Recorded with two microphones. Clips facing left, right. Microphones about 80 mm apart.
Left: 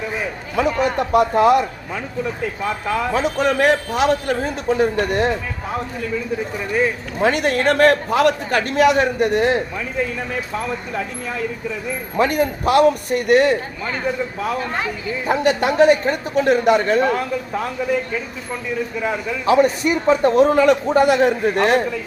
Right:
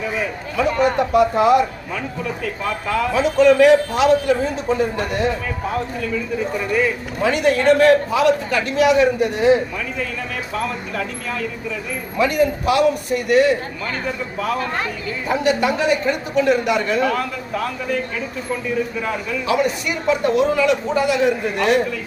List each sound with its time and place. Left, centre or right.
0.9 s a man's voice: left
3.2 s a man's voice: left
7.2 s a man's voice: left
12.1 s a man's voice: left
15.3 s a man's voice: left
19.5 s a man's voice: left